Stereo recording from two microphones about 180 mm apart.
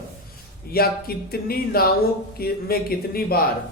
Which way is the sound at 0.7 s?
55° left (ahead or behind).